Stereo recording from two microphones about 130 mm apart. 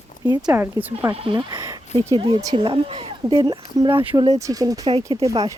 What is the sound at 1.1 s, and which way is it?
Speech, 45° right (ahead or behind).